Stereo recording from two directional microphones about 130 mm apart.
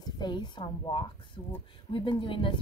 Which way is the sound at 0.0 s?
35° left (ahead or behind).